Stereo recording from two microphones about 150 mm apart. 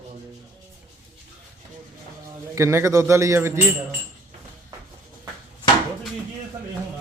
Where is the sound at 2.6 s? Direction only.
20° right (ahead or behind).